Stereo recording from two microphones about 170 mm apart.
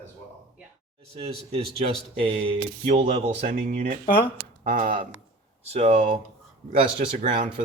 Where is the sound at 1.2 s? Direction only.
35° right (ahead or behind).